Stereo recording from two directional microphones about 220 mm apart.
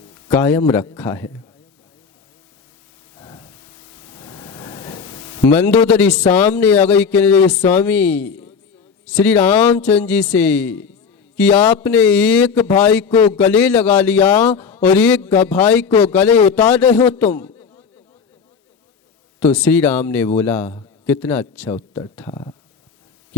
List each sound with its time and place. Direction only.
0.1 s a man's voice: 10° left (ahead or behind)
3.2 s a sound: 15° left (ahead or behind)
6.0 s a man's voice: 5° left (ahead or behind)
19.4 s a man's voice: 5° left (ahead or behind)